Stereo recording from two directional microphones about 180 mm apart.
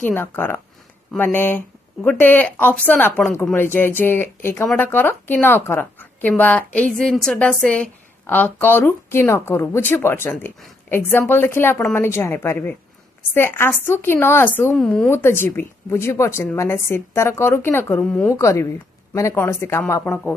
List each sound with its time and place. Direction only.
0.0 s a woman's voice: 10° left (ahead or behind)